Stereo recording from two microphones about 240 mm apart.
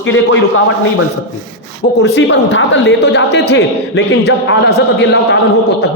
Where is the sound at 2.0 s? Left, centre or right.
Left.